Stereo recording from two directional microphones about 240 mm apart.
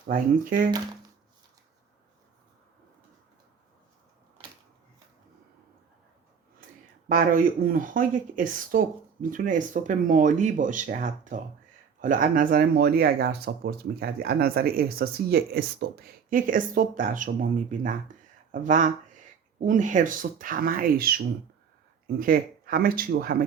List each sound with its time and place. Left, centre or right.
0.1 s speech: right
7.1 s speech: right